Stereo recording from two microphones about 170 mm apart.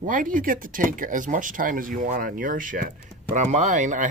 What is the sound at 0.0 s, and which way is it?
Speech, 50° right (ahead or behind).